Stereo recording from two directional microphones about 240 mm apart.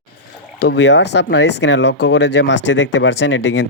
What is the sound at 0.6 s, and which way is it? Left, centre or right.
Speech, left.